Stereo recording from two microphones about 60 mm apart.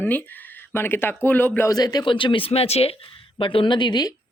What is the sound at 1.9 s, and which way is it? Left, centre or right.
Speech, left.